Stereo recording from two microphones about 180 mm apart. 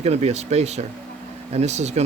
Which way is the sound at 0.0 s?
35° right (ahead or behind).